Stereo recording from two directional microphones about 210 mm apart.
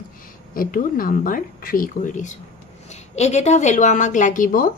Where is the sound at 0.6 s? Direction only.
40° left (ahead or behind).